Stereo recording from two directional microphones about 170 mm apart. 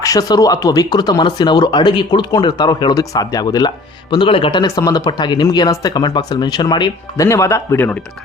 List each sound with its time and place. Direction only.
0.0 s speech: 20° left (ahead or behind)